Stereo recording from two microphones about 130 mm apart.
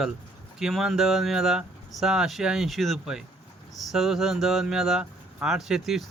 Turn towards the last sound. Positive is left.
turn(degrees=-5)  # may be behind; listen again after turning